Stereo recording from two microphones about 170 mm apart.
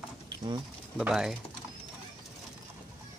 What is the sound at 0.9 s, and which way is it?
Speech, 5° right (ahead or behind).